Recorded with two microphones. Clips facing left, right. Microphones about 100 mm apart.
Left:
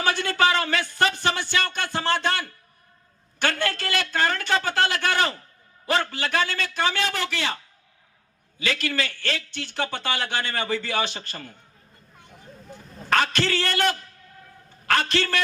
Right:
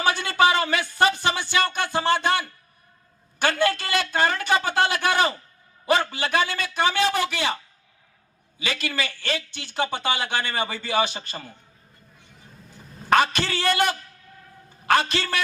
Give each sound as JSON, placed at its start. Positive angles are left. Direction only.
{"t": 0.0, "sound": "a man's voice", "side_deg": -15}
{"t": 13.1, "sound": "a man's voice", "side_deg": -15}